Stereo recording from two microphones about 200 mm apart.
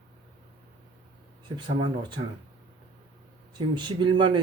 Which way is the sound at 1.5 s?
20° right (ahead or behind).